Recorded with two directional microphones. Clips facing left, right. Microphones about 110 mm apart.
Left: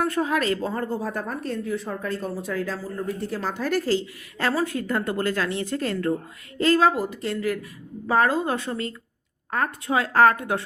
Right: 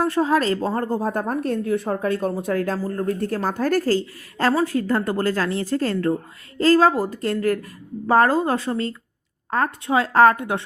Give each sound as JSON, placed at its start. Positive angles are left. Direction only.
{"t": 0.0, "sound": "a woman's voice", "side_deg": -30}
{"t": 4.5, "sound": "a woman's voice", "side_deg": -30}